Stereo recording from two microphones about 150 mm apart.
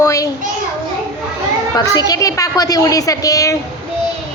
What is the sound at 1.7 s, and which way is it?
A child's voice, 25° left (ahead or behind).